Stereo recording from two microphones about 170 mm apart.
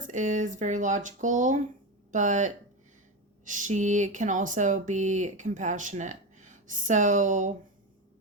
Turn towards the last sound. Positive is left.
turn(degrees=-45)  # may be behind; listen again after turning